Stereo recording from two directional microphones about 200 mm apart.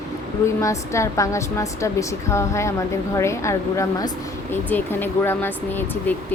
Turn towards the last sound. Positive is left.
turn(degrees=10)  # may be behind; listen again after turning